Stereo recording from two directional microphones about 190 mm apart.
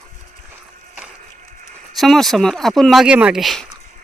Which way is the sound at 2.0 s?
Centre (ahead or behind).